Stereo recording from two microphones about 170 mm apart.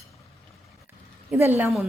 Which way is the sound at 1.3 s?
15° right (ahead or behind).